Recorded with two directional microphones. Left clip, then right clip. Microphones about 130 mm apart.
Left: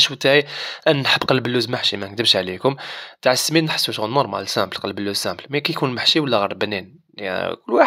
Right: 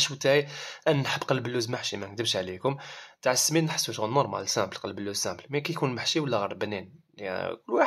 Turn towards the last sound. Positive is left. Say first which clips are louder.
# left 9 dB
turn(degrees=35)  # may be behind; listen again after turning